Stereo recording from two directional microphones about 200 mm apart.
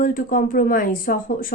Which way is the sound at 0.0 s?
45° left (ahead or behind).